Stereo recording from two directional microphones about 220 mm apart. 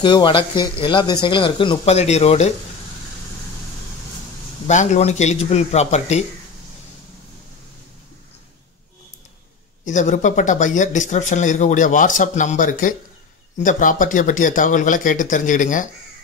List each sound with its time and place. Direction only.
0.0 s speech: 20° left (ahead or behind)
4.6 s speech: 30° left (ahead or behind)
9.8 s speech: 35° left (ahead or behind)